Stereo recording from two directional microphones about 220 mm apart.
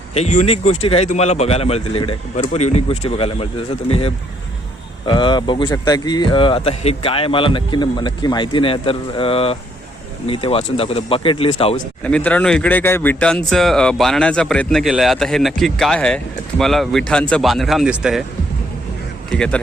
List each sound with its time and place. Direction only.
0.1 s a man's voice: 30° left (ahead or behind)
12.0 s speech: 5° left (ahead or behind)
19.3 s speech: 5° left (ahead or behind)